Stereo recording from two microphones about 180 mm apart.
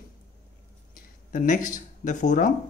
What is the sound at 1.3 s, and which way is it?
Speech, 45° left (ahead or behind).